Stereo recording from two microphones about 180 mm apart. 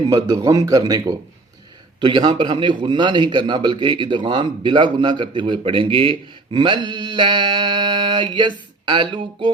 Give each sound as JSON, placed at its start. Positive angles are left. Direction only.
{"t": 0.1, "sound": "a man's voice", "side_deg": -20}